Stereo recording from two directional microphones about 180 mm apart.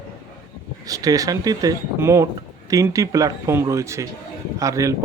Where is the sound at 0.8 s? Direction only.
20° right (ahead or behind).